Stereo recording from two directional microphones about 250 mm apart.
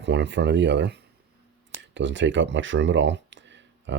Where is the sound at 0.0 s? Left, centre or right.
Right.